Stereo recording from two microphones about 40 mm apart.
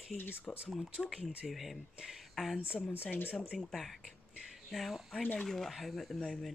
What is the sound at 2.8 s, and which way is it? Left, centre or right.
Speech, left.